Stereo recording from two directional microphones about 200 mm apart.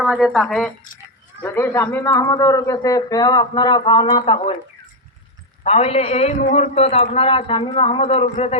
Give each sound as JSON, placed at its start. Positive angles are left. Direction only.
{"t": 0.0, "sound": "a man's voice", "side_deg": 0}
{"t": 5.6, "sound": "a man's voice", "side_deg": 30}